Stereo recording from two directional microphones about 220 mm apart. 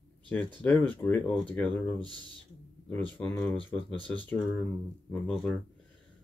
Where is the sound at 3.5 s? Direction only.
25° left (ahead or behind).